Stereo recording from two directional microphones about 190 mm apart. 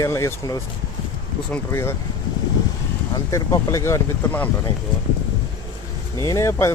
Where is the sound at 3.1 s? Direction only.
15° left (ahead or behind).